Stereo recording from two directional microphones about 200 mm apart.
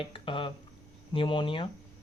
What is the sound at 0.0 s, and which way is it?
Speech, 25° left (ahead or behind).